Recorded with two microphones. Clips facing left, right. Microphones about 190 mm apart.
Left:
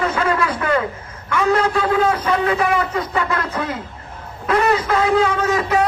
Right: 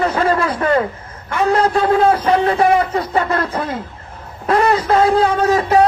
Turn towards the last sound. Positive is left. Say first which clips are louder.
# right 5 dB
turn(degrees=-35)  # may be behind; listen again after turning